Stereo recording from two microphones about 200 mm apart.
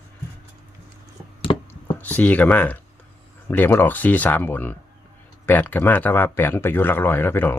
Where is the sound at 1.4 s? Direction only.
25° left (ahead or behind).